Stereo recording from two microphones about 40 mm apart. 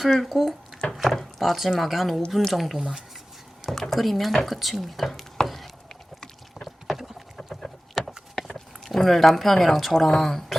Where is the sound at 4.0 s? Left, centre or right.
Centre.